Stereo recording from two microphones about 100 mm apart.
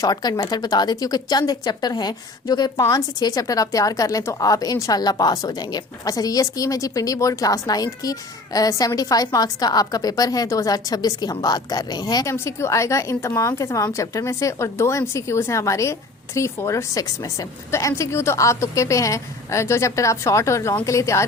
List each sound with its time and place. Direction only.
0.0 s a woman's voice: 40° left (ahead or behind)
12.3 s a woman's voice: 30° left (ahead or behind)